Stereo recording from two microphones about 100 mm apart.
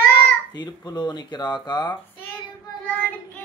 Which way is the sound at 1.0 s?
45° left (ahead or behind).